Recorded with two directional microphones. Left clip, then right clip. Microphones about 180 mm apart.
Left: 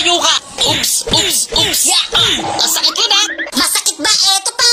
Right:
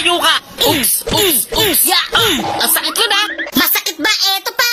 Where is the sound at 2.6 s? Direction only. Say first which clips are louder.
Left 2 dB; 20° right (ahead or behind).